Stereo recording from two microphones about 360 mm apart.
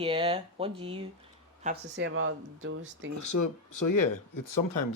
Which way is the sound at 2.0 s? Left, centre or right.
Right.